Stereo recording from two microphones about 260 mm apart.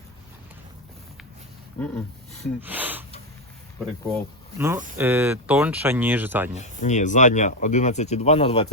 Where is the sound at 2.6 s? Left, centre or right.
Centre.